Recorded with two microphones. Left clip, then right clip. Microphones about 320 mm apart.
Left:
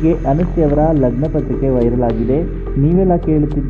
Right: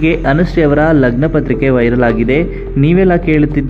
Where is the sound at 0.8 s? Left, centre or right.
Right.